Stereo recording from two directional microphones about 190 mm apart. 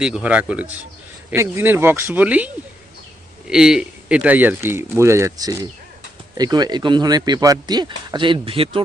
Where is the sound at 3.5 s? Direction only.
5° right (ahead or behind).